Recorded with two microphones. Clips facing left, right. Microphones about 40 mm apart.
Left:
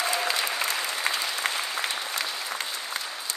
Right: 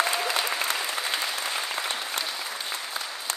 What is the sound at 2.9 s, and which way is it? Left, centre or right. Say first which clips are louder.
Applause: left 1 dB; left.